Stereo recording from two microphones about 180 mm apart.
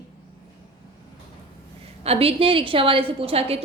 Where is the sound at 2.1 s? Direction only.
35° right (ahead or behind).